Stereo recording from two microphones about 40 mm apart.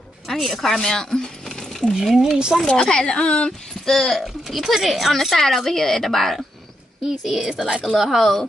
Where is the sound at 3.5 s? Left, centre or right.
Centre.